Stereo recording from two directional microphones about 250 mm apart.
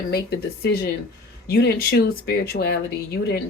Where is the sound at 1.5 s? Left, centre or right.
Left.